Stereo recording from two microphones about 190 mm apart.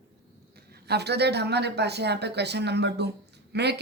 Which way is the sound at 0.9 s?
60° right (ahead or behind).